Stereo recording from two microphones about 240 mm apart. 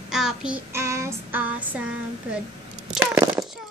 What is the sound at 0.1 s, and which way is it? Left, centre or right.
Child singing, centre.